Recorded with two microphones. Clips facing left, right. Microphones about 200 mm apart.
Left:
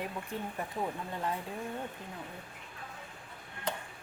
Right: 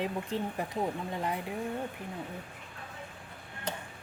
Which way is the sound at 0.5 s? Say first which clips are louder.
Right 3 dB; 15° right (ahead or behind).